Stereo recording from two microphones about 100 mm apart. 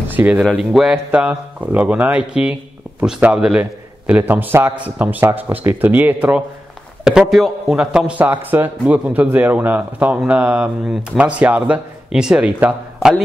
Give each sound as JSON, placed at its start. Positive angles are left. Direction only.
{"t": 0.1, "sound": "speech", "side_deg": -20}
{"t": 0.6, "sound": "a man's voice", "side_deg": -5}
{"t": 4.1, "sound": "a man's voice", "side_deg": -20}
{"t": 7.1, "sound": "a man's voice", "side_deg": -5}